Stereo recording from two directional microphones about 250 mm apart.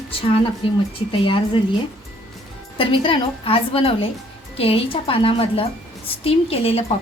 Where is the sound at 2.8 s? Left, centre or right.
Centre.